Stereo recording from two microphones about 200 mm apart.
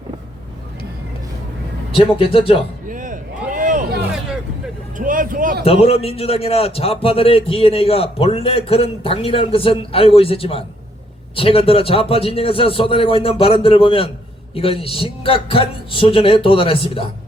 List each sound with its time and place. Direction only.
2.1 s a man's voice: 25° left (ahead or behind)
2.9 s a sound: 40° right (ahead or behind)
4.9 s vehicle: 45° right (ahead or behind)
5.6 s a man's voice: 30° left (ahead or behind)